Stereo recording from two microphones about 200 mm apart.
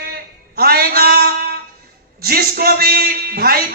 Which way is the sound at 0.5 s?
50° right (ahead or behind).